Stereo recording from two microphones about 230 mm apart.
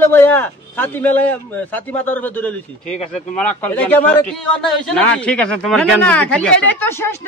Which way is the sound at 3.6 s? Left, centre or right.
Centre.